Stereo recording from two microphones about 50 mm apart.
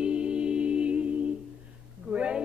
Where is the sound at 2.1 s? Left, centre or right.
Right.